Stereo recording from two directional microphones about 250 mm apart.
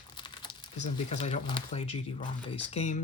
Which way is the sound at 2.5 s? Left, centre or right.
Left.